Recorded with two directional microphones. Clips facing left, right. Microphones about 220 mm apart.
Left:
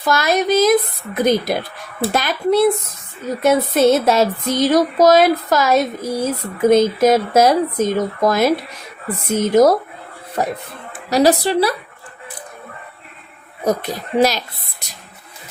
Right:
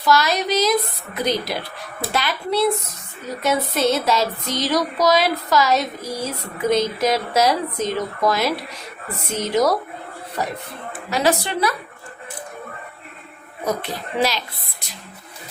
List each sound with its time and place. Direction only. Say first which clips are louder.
0.0 s speech: left 2 dB; 50° left (ahead or behind)
11.1 s a woman's voice: left 6 dB; 35° left (ahead or behind)
13.7 s speech: left 5 dB; 45° left (ahead or behind)